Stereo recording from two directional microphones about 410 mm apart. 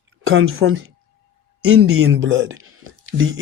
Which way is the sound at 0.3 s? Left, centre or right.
Right.